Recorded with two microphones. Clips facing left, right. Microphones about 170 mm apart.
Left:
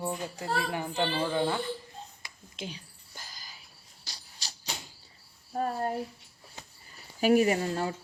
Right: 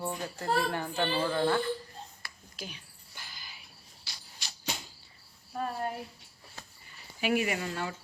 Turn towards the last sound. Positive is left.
turn(degrees=35)  # may be behind; listen again after turning